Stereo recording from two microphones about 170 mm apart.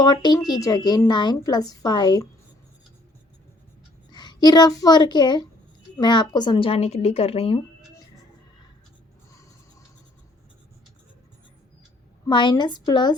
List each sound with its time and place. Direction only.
0.0 s a woman's voice: 25° left (ahead or behind)
4.1 s a child's voice: 25° left (ahead or behind)
12.3 s a woman's voice: 25° left (ahead or behind)